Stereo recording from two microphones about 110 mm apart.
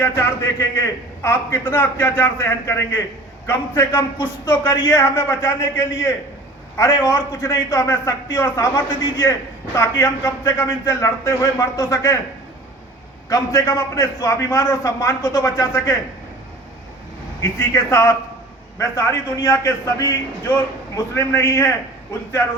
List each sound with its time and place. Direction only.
1.2 s a man's voice: 20° left (ahead or behind)
13.3 s a man's voice: 30° left (ahead or behind)
17.4 s a man's voice: 25° left (ahead or behind)